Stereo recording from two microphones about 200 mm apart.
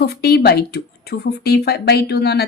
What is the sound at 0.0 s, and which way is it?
Speech, 50° left (ahead or behind).